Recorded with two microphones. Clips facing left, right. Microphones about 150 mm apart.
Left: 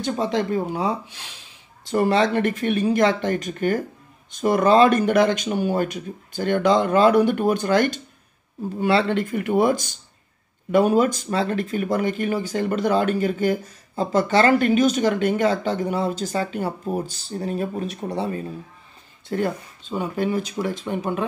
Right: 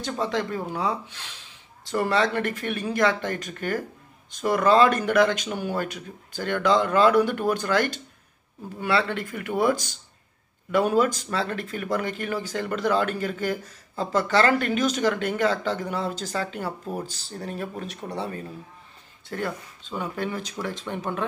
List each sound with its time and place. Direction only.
0.0 s speech: 20° left (ahead or behind)